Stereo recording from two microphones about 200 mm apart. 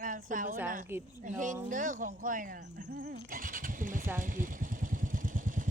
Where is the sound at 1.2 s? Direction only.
40° right (ahead or behind).